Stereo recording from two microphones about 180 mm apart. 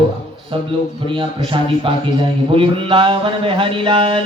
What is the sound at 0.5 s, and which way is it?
Speech, 30° right (ahead or behind).